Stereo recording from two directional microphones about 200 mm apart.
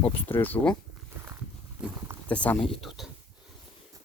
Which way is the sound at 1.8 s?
5° right (ahead or behind).